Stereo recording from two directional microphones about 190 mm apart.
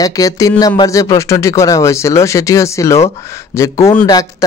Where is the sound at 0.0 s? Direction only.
20° left (ahead or behind).